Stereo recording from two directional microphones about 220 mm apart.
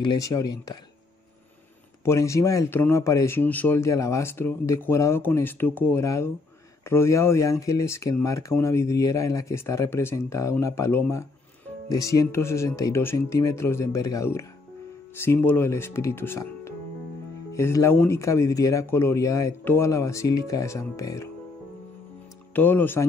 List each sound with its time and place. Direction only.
0.0 s speech: 15° left (ahead or behind)
2.0 s speech: 15° left (ahead or behind)
22.5 s speech: 10° left (ahead or behind)